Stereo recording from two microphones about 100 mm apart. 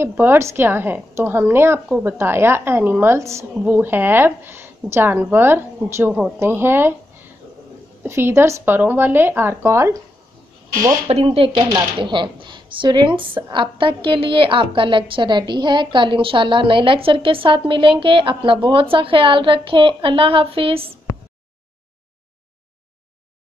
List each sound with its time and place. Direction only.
0.0 s speech: 25° right (ahead or behind)
1.9 s speech: 10° right (ahead or behind)
2.1 s speech: 25° right (ahead or behind)
8.0 s speech: 25° right (ahead or behind)
11.1 s a woman's voice: 80° right; by 11.6 s 60° right (ahead or behind)
12.0 s a woman's voice: 50° right (ahead or behind); by 21.0 s 70° right (ahead or behind)